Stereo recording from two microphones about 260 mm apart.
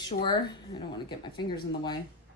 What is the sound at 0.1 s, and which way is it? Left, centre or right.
Speech, centre.